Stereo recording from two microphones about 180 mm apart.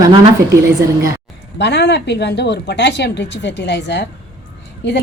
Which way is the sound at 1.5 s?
65° left (ahead or behind).